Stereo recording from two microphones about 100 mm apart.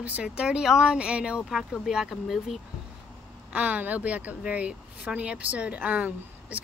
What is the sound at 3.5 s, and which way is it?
Speech, 15° right (ahead or behind).